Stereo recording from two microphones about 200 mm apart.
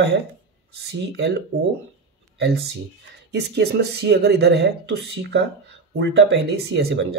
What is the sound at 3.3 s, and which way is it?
Speech, 60° right (ahead or behind).